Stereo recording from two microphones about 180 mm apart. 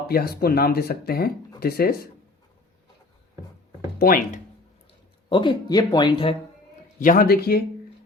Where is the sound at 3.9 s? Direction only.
55° left (ahead or behind).